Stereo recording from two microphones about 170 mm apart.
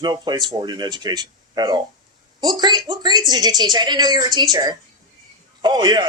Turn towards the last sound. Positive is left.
turn(degrees=-25)  # may be behind; listen again after turning